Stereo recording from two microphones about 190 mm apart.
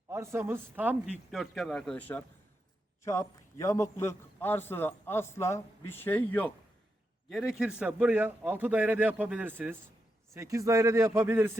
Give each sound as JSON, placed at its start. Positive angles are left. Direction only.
{"t": 0.1, "sound": "a man's voice", "side_deg": -15}
{"t": 7.3, "sound": "a man's voice", "side_deg": 0}